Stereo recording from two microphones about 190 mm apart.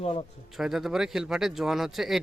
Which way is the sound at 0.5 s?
Centre (ahead or behind).